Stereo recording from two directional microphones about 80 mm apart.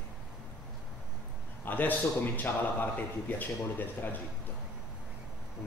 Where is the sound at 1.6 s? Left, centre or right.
Left.